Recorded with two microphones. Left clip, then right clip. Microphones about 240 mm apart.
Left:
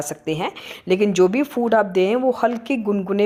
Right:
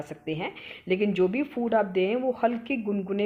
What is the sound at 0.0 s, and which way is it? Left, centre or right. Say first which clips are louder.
Speech: left 8 dB; centre.